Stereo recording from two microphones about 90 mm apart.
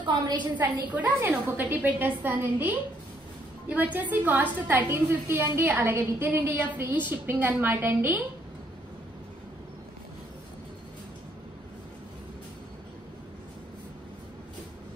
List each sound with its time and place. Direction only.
0.0 s a woman's voice: 60° right (ahead or behind)
0.6 s a woman's voice: 20° right (ahead or behind)